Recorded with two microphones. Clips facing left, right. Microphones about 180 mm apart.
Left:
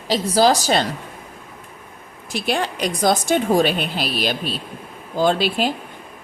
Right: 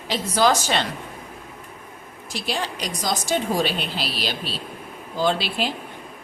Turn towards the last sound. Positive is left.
turn(degrees=45)  # may be behind; listen again after turning